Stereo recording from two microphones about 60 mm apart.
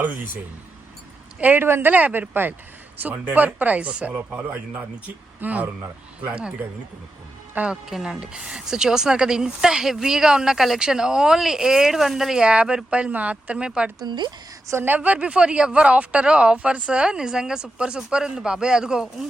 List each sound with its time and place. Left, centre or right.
1.4 s speech: right
1.6 s speech: right
1.9 s speech: right
7.7 s speech: centre
12.4 s speech: centre
14.8 s speech: right; by 19.0 s centre